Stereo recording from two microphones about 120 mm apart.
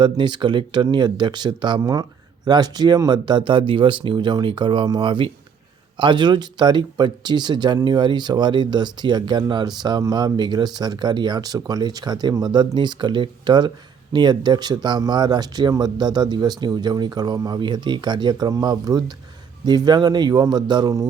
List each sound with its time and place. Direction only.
0.0 s speech: 40° right (ahead or behind)